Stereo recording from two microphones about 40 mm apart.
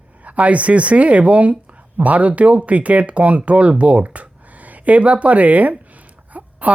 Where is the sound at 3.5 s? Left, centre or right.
Right.